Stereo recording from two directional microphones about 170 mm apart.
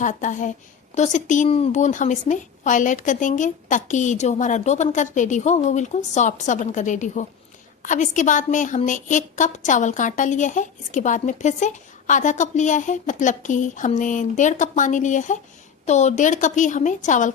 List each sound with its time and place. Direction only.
0.0 s a woman's voice: 45° left (ahead or behind)